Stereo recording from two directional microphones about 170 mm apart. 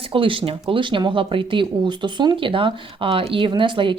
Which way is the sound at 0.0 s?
30° right (ahead or behind).